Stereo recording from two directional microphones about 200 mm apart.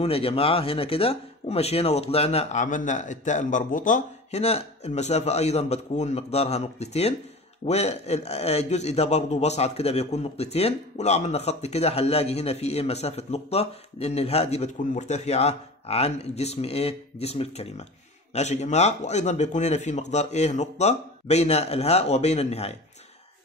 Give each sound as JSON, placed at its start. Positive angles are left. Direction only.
{"t": 0.0, "sound": "a man's voice", "side_deg": 30}